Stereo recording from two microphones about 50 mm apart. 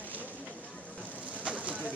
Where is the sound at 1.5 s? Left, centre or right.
Right.